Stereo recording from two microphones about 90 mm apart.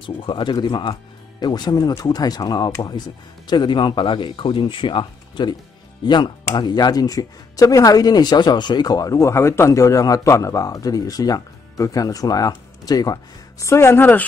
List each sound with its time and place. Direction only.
0.0 s speech: 65° left (ahead or behind); by 13.7 s 45° left (ahead or behind)
13.7 s a woman's voice: 30° left (ahead or behind)